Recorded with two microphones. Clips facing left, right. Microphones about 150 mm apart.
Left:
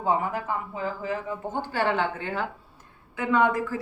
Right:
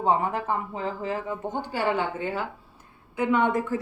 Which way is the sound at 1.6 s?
10° right (ahead or behind).